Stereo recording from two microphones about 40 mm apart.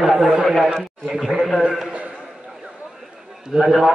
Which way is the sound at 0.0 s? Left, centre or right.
Centre.